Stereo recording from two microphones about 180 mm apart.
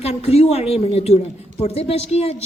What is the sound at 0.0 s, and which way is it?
A woman's voice, 35° left (ahead or behind).